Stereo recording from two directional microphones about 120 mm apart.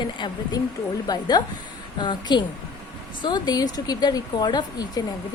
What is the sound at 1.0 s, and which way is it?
A woman's voice, 35° left (ahead or behind).